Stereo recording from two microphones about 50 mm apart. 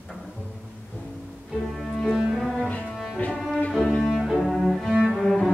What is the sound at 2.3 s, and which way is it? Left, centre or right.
Cello, centre.